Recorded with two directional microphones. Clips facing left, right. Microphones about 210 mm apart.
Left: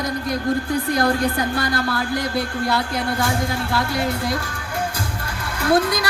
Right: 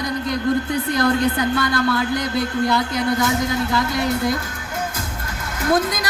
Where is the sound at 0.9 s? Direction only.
20° right (ahead or behind).